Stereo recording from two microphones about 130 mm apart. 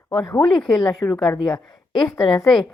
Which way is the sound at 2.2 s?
35° left (ahead or behind).